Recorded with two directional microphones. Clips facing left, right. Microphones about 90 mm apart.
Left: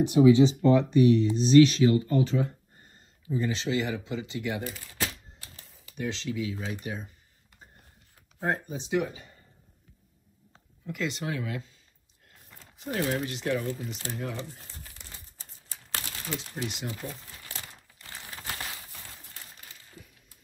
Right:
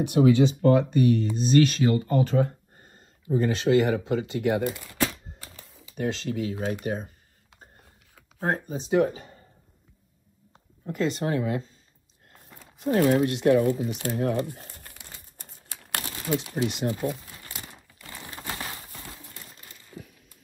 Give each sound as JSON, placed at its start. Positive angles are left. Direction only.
{"t": 0.0, "sound": "speech", "side_deg": -55}
{"t": 5.4, "sound": "typewriter", "side_deg": -35}
{"t": 5.9, "sound": "speech", "side_deg": -45}
{"t": 8.5, "sound": "speech", "side_deg": -40}
{"t": 10.9, "sound": "speech", "side_deg": -40}
{"t": 13.0, "sound": "speech", "side_deg": -90}
{"t": 13.3, "sound": "speech", "side_deg": -55}
{"t": 14.0, "sound": "speech", "side_deg": -45}
{"t": 15.7, "sound": "pigeon", "side_deg": -90}
{"t": 16.6, "sound": "speech", "side_deg": -50}
{"t": 18.3, "sound": "bird", "side_deg": -35}